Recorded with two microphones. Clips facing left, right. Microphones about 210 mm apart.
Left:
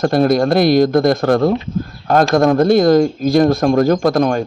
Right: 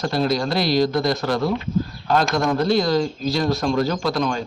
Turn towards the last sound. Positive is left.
turn(degrees=55)  # may be behind; listen again after turning